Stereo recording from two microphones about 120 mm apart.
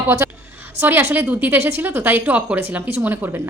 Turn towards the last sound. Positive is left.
turn(degrees=-15)  # may be behind; listen again after turning